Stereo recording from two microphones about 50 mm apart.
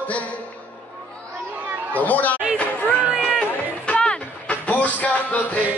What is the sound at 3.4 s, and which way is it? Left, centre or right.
Music, centre.